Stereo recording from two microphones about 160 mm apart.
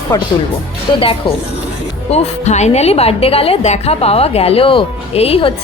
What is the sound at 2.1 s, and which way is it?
A woman's voice, 45° left (ahead or behind).